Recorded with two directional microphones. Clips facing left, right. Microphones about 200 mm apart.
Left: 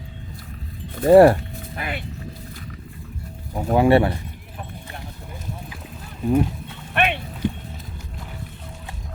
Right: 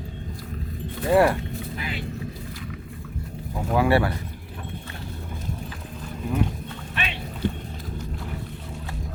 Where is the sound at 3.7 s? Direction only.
25° left (ahead or behind).